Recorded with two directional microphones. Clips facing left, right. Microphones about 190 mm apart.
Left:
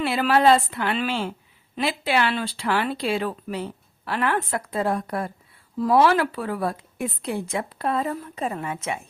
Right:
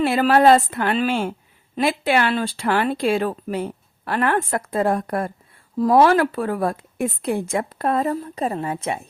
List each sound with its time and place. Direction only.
0.0 s speech: 45° right (ahead or behind)